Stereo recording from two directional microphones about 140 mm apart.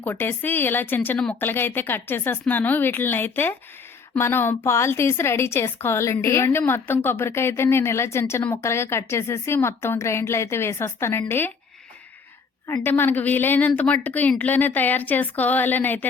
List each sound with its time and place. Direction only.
0.0 s a woman's voice: 15° left (ahead or behind)
12.6 s a woman's voice: 20° left (ahead or behind)